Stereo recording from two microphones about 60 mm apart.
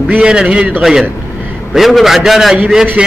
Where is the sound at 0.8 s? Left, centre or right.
Centre.